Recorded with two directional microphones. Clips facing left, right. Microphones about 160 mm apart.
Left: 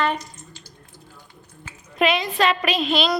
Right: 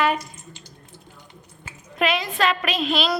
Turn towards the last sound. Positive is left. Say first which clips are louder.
# left 2 dB
turn(degrees=0)  # may be behind; listen again after turning